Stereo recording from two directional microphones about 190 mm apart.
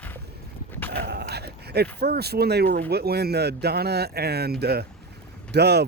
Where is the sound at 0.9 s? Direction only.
60° right (ahead or behind).